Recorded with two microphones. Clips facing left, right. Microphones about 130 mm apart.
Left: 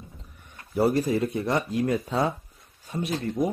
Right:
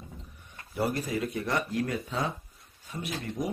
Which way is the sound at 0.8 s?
30° left (ahead or behind).